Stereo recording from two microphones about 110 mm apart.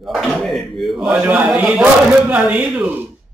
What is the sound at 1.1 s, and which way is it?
Speech, 15° right (ahead or behind).